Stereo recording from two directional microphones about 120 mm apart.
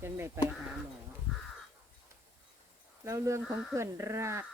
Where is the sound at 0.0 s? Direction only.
20° right (ahead or behind).